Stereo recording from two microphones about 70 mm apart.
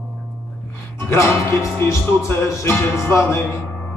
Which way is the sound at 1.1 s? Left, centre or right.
Left.